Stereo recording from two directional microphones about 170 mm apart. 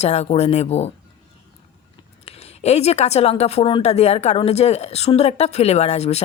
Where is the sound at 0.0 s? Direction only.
40° left (ahead or behind).